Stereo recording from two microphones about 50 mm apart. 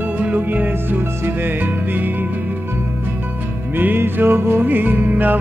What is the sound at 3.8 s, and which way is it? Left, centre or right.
Music, right.